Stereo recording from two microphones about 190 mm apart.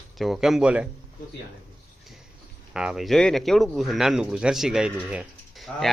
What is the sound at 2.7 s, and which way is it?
Speech, 5° right (ahead or behind).